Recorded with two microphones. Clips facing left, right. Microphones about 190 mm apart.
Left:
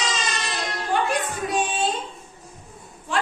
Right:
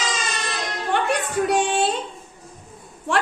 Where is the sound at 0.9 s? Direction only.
65° right (ahead or behind).